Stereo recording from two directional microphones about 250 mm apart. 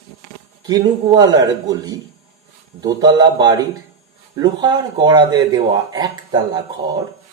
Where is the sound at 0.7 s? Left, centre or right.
Centre.